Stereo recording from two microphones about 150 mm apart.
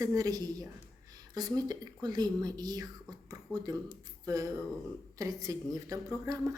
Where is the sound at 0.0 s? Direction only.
25° right (ahead or behind).